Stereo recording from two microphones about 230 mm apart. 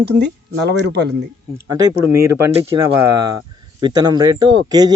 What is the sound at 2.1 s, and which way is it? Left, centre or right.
Speech, centre.